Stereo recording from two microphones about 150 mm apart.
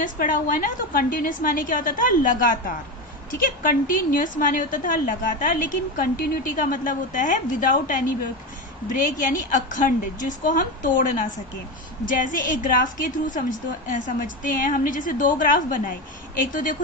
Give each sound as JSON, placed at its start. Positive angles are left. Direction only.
{"t": 0.0, "sound": "a woman's voice", "side_deg": 65}
{"t": 9.5, "sound": "a woman's voice", "side_deg": 60}